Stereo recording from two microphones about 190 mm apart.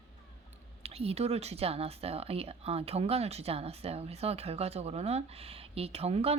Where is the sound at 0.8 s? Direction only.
30° right (ahead or behind).